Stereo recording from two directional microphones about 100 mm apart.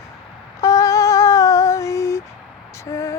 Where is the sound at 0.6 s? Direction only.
35° left (ahead or behind).